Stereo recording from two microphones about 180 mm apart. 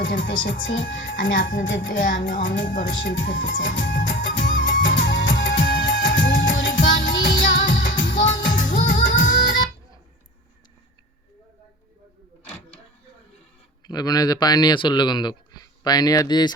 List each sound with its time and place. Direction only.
0.0 s speech: 90° left
3.8 s music: 90° left
8.5 s music: 50° left (ahead or behind)
13.8 s speech: 20° left (ahead or behind)